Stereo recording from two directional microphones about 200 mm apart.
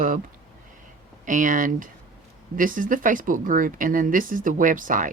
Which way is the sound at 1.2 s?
40° right (ahead or behind).